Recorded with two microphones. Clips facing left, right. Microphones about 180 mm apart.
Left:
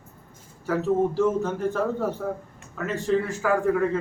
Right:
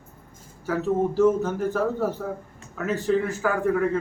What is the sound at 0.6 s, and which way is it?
A man's voice, centre (ahead or behind).